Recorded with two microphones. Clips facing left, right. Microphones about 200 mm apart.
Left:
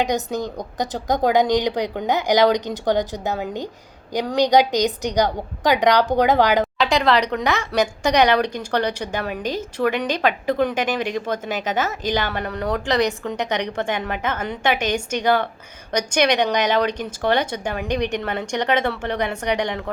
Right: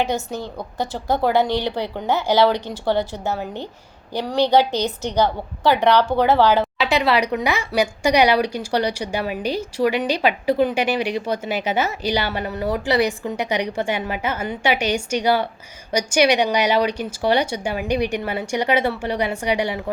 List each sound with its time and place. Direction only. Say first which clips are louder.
0.0 s speech: left 1 dB; 15° left (ahead or behind)
6.7 s speech: left 1 dB; 5° right (ahead or behind)